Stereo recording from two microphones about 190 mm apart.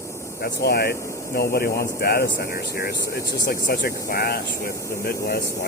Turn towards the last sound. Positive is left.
turn(degrees=55)  # may be behind; listen again after turning